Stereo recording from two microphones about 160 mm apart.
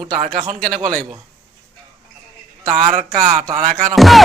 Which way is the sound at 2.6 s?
55° right (ahead or behind).